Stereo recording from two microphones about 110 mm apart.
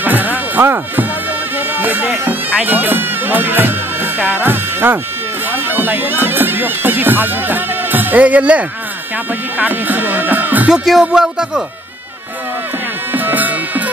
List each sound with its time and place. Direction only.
0.0 s music: 15° right (ahead or behind)
1.6 s speech: 15° right (ahead or behind)
10.7 s music: 5° right (ahead or behind)
13.1 s music: 15° right (ahead or behind)